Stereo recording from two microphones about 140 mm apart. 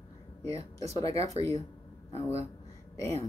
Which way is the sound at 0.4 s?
45° right (ahead or behind).